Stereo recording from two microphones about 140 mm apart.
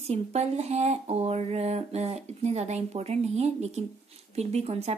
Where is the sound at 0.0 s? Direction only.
50° right (ahead or behind).